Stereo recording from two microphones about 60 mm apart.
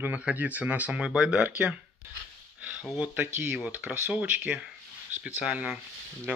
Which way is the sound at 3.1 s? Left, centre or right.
Right.